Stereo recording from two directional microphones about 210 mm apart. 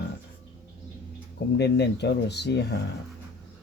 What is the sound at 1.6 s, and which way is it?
Speech, 55° left (ahead or behind).